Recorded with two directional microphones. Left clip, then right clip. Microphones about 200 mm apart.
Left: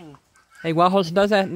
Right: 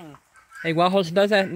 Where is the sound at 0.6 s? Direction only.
15° left (ahead or behind).